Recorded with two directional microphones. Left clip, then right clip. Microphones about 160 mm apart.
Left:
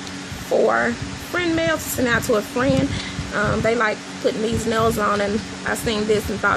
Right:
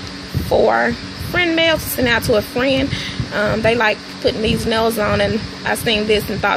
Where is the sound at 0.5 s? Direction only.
15° right (ahead or behind).